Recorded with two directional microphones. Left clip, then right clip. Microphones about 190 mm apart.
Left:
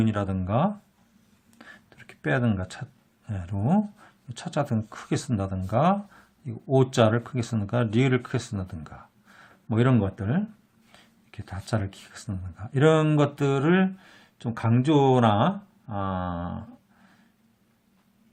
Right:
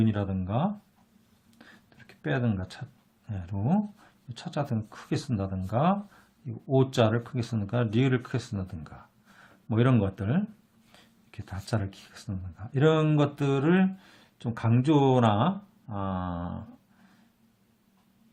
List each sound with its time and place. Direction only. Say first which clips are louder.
0.0 s speech: left 3 dB; 25° left (ahead or behind)
1.5 s a sound: left 6 dB; 20° left (ahead or behind)
3.2 s speech: left 3 dB; 20° left (ahead or behind)